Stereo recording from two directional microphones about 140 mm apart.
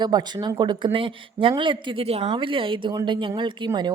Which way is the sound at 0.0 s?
30° right (ahead or behind).